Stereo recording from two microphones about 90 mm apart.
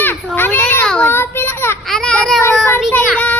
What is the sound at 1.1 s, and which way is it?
Speech, 25° left (ahead or behind).